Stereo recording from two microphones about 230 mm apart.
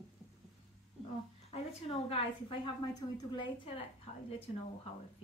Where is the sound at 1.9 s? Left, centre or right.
Left.